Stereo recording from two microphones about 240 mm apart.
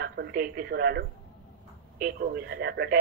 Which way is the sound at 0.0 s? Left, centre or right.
Right.